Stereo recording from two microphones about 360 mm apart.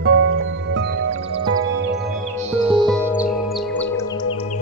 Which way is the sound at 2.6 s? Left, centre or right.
Centre.